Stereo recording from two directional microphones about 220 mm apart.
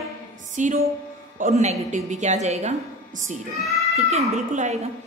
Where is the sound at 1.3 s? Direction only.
30° right (ahead or behind).